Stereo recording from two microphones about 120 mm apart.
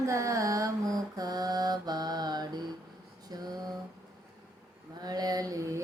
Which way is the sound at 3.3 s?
35° right (ahead or behind).